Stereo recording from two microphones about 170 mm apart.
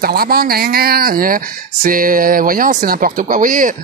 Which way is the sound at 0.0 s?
60° right (ahead or behind).